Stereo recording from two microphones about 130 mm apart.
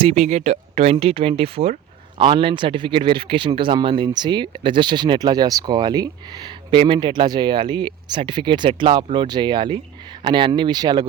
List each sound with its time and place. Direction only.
0.1 s a man's voice: 55° right (ahead or behind); by 11.0 s 30° right (ahead or behind)